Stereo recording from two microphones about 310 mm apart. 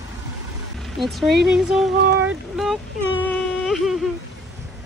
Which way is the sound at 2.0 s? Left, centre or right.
Right.